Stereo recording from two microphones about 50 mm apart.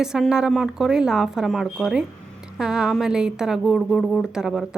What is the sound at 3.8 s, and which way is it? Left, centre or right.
Speech, centre.